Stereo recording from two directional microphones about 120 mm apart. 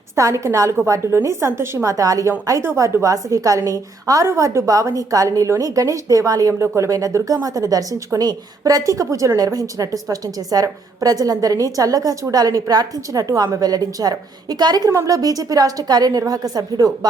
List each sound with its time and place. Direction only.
0.2 s a woman's voice: 25° right (ahead or behind)